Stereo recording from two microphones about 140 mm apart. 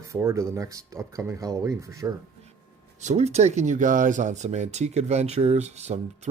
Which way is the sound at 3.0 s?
55° right (ahead or behind).